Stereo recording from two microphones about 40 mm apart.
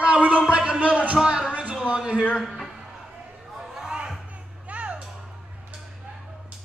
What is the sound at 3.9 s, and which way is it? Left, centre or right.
Music, centre.